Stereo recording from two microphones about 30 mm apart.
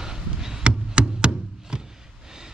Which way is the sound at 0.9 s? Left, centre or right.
Right.